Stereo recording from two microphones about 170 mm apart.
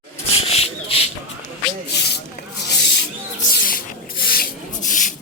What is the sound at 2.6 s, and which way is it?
Snake, 80° left.